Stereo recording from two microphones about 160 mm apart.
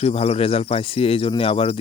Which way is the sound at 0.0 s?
40° left (ahead or behind).